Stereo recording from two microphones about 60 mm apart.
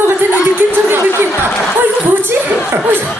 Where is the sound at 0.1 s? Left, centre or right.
Right.